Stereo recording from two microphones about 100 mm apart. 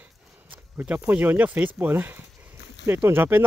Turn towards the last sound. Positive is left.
turn(degrees=-20)  # may be behind; listen again after turning